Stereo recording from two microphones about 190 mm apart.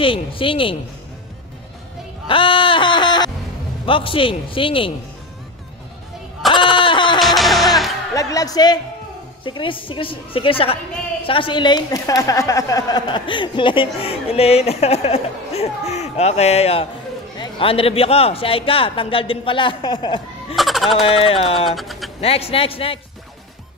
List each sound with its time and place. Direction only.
0.0 s a woman's voice: 25° left (ahead or behind)
2.2 s a sound: 25° left (ahead or behind)
3.8 s a woman's voice: 30° left (ahead or behind)
6.8 s music: 25° left (ahead or behind)
7.2 s music: centre (ahead or behind)
8.1 s a woman's voice: 20° left (ahead or behind)
20.5 s a sound: centre (ahead or behind)
21.0 s speech: 30° left (ahead or behind)
21.6 s speech: centre (ahead or behind)
22.2 s a woman's voice: 30° left (ahead or behind)